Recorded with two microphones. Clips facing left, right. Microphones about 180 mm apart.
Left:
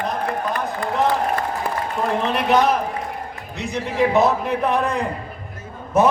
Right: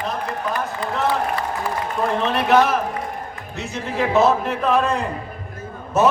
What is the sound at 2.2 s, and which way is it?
A man's voice, 15° left (ahead or behind).